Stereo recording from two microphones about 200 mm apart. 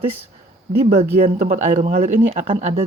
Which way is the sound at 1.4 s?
35° right (ahead or behind).